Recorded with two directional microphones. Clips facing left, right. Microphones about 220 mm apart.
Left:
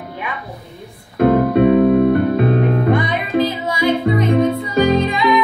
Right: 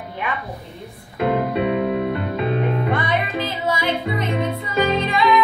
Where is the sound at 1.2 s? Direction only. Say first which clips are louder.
Left 8 dB; 50° left (ahead or behind).